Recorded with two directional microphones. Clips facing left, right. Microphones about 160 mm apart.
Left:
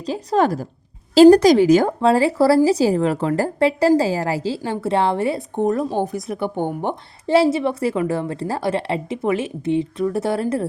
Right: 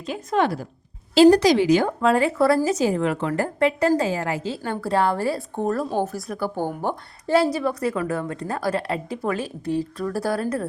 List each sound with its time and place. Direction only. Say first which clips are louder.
0.0 s a woman's voice: left 4 dB; 35° left (ahead or behind)